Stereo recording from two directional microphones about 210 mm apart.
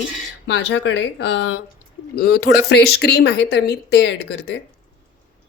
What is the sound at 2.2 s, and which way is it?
Speech, 50° left (ahead or behind).